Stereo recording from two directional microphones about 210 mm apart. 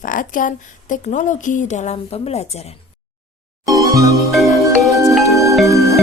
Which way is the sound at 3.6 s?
15° right (ahead or behind).